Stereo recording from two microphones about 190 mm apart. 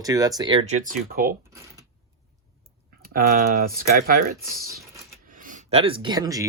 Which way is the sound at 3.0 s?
50° right (ahead or behind).